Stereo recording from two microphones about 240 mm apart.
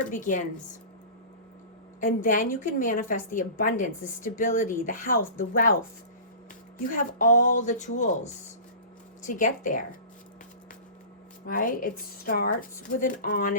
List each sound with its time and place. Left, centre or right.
0.0 s a woman's voice: left
2.0 s a woman's voice: left
6.7 s a woman's voice: left
11.4 s a woman's voice: left